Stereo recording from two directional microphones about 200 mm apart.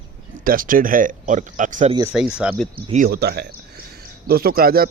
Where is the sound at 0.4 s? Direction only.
45° right (ahead or behind).